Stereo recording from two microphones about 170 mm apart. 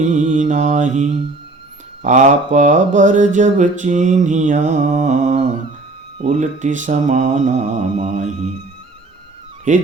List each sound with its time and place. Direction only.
0.0 s mantra: 50° right (ahead or behind)
9.7 s mantra: 45° right (ahead or behind)